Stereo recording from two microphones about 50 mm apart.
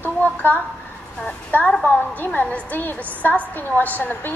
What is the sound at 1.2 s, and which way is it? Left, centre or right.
Speech, left.